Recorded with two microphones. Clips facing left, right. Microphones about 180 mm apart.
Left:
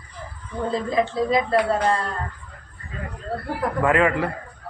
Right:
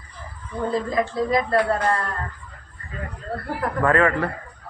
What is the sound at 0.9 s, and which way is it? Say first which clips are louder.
Speech: left 3 dB; 20° left (ahead or behind).